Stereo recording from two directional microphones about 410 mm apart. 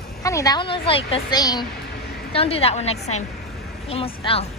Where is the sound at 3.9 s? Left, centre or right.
Centre.